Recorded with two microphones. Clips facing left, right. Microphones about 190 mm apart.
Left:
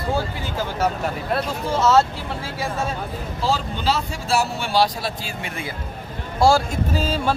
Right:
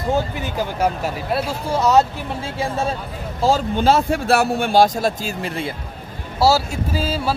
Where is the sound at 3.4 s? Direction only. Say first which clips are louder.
Right 6 dB; 50° right (ahead or behind).